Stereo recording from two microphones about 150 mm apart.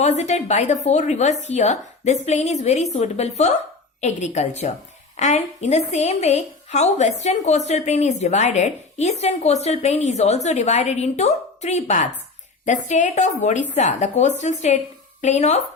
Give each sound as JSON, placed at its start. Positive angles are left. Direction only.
{"t": 0.0, "sound": "a woman's voice", "side_deg": 50}